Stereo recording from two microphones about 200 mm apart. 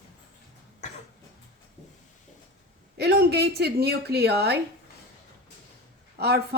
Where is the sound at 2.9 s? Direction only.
55° right (ahead or behind).